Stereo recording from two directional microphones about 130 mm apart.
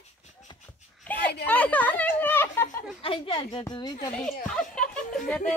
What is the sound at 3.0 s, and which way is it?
Speech, 40° left (ahead or behind).